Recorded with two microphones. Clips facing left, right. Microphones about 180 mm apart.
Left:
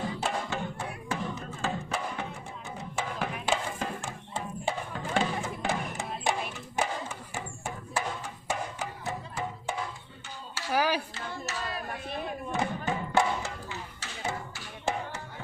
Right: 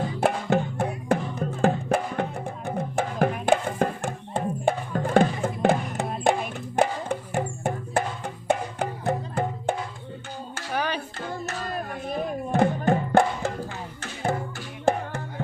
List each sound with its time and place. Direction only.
0.2 s music: 55° right (ahead or behind)
10.7 s a sound: 5° left (ahead or behind)
11.3 s music: 45° right (ahead or behind)